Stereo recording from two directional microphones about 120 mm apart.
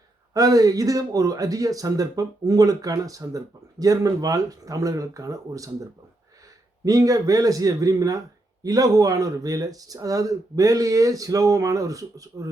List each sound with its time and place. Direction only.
0.3 s speech: 30° right (ahead or behind)
6.8 s speech: 30° right (ahead or behind)